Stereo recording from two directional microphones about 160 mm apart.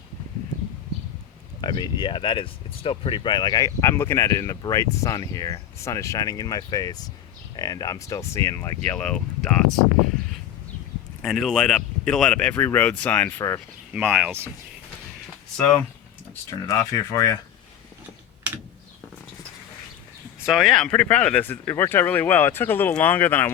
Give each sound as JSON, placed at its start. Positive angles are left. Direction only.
{"t": 1.6, "sound": "speech", "side_deg": 30}
{"t": 8.9, "sound": "speech", "side_deg": 5}
{"t": 11.2, "sound": "speech", "side_deg": 0}
{"t": 13.9, "sound": "speech", "side_deg": -5}
{"t": 16.6, "sound": "speech", "side_deg": 20}
{"t": 18.5, "sound": "a sound", "side_deg": -10}
{"t": 20.4, "sound": "speech", "side_deg": 0}